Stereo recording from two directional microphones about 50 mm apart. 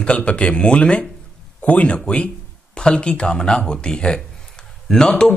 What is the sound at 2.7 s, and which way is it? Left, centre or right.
Speech, centre.